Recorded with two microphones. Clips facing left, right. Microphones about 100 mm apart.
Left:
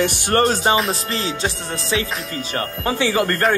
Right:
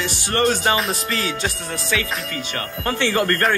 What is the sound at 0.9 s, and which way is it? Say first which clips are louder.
Music: even; 30° left (ahead or behind).